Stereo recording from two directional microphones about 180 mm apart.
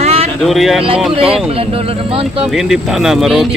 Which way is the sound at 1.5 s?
30° right (ahead or behind).